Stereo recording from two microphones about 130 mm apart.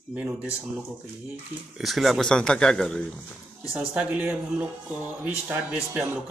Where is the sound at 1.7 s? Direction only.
Centre (ahead or behind).